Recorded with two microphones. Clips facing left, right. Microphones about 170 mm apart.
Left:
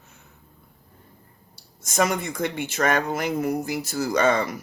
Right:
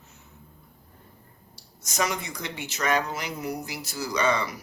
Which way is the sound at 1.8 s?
50° left (ahead or behind).